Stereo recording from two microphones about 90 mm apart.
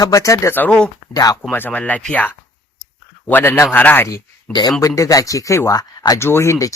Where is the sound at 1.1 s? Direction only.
40° left (ahead or behind).